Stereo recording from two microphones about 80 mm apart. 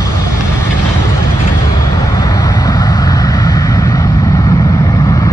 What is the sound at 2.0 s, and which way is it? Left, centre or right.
Vehicle, left.